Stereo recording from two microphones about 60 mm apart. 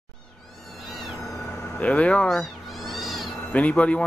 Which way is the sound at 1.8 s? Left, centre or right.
Left.